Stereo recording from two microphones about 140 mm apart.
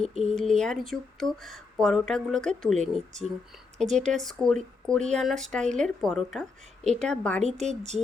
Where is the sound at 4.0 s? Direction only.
5° left (ahead or behind).